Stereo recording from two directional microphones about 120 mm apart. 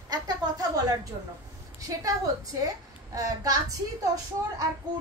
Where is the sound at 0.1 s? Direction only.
35° right (ahead or behind).